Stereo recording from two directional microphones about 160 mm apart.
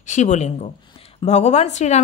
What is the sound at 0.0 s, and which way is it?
A woman's voice, 50° left (ahead or behind).